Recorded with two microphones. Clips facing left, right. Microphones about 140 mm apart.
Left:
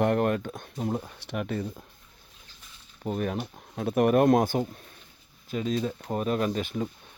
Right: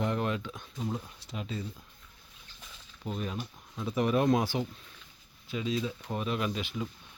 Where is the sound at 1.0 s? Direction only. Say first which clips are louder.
Left 8 dB; 70° left (ahead or behind).